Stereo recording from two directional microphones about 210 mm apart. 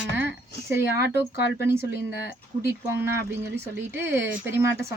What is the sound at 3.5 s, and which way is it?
A woman's voice, 10° right (ahead or behind).